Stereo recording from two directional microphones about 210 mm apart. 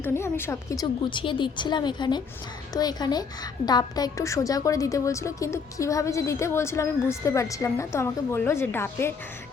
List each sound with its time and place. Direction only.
0.0 s a woman's voice: 10° left (ahead or behind)